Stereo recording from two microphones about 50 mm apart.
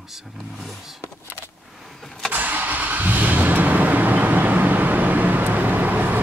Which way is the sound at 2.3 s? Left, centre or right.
Right.